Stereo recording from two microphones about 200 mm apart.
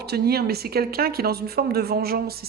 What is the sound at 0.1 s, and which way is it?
Speech, 50° right (ahead or behind).